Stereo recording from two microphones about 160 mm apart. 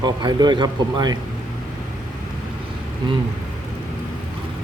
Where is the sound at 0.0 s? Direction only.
25° right (ahead or behind).